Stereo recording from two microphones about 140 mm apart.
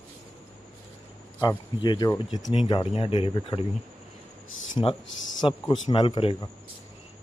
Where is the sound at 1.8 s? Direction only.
35° left (ahead or behind).